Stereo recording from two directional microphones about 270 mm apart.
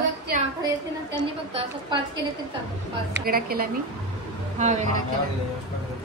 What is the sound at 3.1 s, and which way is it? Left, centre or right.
A woman's voice, right.